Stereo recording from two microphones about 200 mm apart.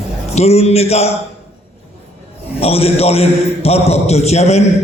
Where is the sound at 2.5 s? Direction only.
30° left (ahead or behind).